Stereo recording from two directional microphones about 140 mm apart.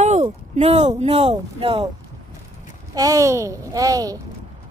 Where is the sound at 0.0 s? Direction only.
55° right (ahead or behind).